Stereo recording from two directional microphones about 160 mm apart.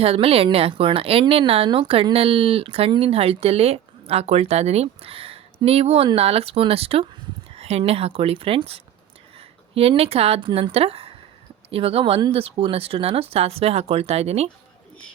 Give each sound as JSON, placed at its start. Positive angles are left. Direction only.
{"t": 0.0, "sound": "speech", "side_deg": -40}